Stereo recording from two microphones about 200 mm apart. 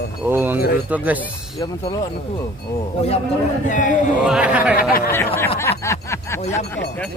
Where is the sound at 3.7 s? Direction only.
40° left (ahead or behind).